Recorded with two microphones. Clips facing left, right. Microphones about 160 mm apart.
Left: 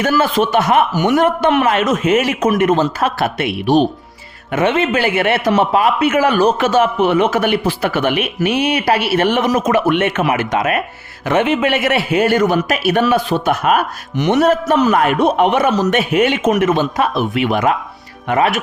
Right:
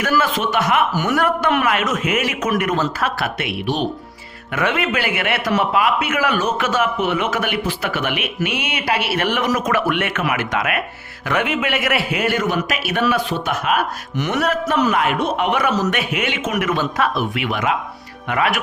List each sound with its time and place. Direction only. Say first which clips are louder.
0.0 s a man's voice: left 4 dB; 30° left (ahead or behind)
0.9 s a man's voice: left 5 dB; 20° left (ahead or behind)
14.7 s a man's voice: left 5 dB; 40° left (ahead or behind)
15.5 s a man's voice: left 5 dB; 30° left (ahead or behind)
16.1 s speech: left 9 dB; 40° left (ahead or behind)
16.5 s a man's voice: left 6 dB; 30° left (ahead or behind)